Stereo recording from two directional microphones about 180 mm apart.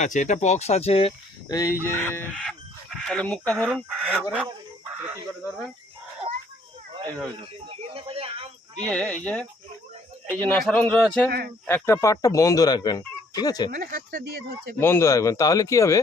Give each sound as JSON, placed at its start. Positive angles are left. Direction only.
{"t": 0.0, "sound": "speech", "side_deg": 40}
{"t": 1.5, "sound": "a man's voice", "side_deg": 20}
{"t": 7.7, "sound": "a sound", "side_deg": -30}
{"t": 8.9, "sound": "a man's voice", "side_deg": 5}
{"t": 11.3, "sound": "speech", "side_deg": -60}
{"t": 11.6, "sound": "speech", "side_deg": 15}
{"t": 13.7, "sound": "speech", "side_deg": -50}
{"t": 14.8, "sound": "speech", "side_deg": 15}